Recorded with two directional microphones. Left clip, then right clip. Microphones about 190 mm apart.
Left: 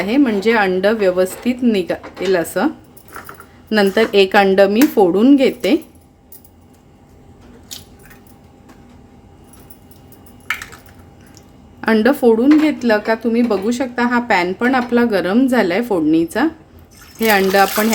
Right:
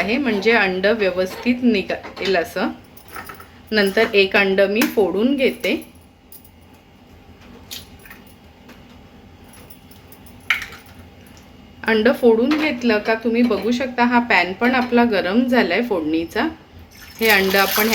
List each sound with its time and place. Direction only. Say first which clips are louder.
0.0 s a woman's voice: left 3 dB; 60° left (ahead or behind)
3.7 s speech: left 3 dB; 65° left (ahead or behind)
11.8 s a woman's voice: left 2 dB; 65° left (ahead or behind)